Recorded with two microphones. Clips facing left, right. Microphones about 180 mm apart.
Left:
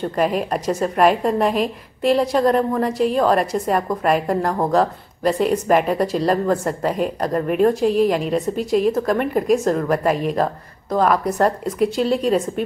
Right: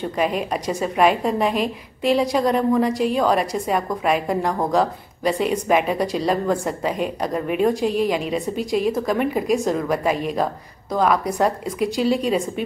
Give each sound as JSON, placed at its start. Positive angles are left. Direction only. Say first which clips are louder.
{"t": 0.0, "sound": "a woman's voice", "louder": "left 2 dB", "side_deg": 0}